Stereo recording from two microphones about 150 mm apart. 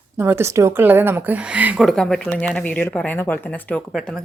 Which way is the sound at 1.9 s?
5° left (ahead or behind).